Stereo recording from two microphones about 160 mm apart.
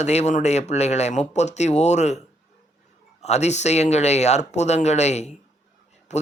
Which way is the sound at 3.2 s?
45° left (ahead or behind).